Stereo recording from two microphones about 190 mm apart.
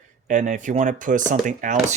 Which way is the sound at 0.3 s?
40° right (ahead or behind).